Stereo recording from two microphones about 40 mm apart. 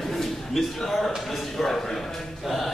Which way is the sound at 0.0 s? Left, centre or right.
Centre.